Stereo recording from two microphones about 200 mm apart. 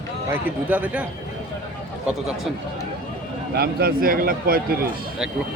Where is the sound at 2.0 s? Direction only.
Centre (ahead or behind).